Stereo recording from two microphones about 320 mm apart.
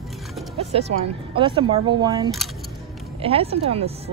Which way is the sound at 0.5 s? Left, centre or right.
Centre.